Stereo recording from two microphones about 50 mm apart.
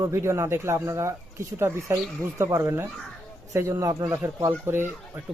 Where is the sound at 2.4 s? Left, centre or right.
Right.